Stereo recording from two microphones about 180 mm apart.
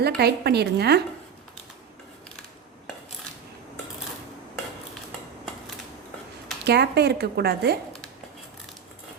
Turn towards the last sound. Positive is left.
turn(degrees=-65)  # may be behind; listen again after turning